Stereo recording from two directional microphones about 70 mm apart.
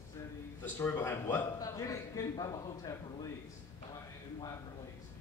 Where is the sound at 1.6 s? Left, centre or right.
Left.